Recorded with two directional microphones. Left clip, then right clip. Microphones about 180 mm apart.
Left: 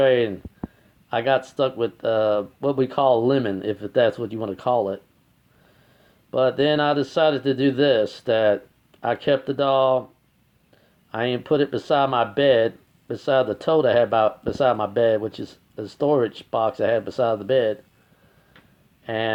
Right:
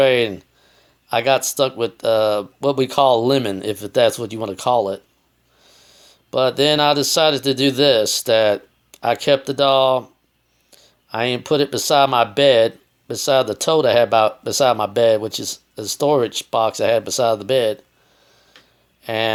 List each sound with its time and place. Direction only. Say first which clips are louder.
0.0 s speech: right 3 dB; 20° right (ahead or behind)
6.3 s speech: right 3 dB; 20° right (ahead or behind)
19.0 s speech: right 5 dB; 20° right (ahead or behind)